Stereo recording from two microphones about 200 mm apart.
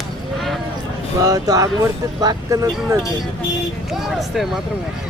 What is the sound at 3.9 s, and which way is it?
Speech, centre (ahead or behind).